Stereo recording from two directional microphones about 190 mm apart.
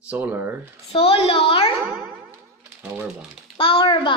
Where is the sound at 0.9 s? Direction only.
30° left (ahead or behind).